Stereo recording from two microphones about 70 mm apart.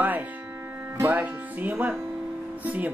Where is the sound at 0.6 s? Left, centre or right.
Right.